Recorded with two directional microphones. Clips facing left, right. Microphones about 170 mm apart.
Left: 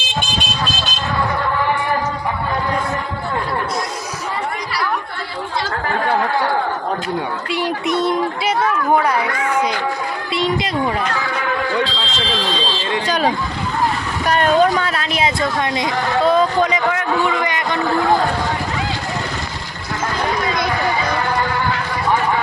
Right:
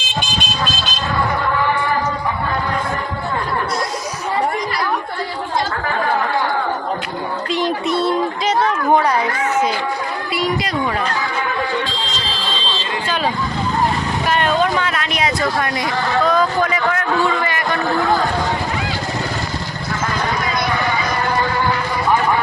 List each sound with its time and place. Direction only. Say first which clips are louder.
7.5 s speech: right 1 dB; 15° left (ahead or behind)
10.3 s a woman's voice: left 1 dB; 25° left (ahead or behind)
13.1 s speech: left 1 dB; 40° left (ahead or behind); by 17.7 s 15° left (ahead or behind)